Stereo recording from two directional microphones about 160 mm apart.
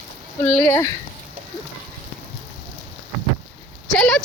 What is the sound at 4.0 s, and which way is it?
Speech, 5° left (ahead or behind).